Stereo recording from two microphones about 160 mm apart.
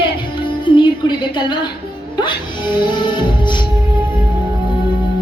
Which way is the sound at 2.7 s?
30° left (ahead or behind).